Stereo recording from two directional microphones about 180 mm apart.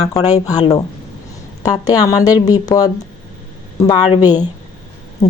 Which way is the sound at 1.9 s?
20° left (ahead or behind).